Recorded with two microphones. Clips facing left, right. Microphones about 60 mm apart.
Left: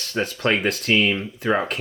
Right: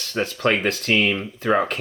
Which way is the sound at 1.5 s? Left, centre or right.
Centre.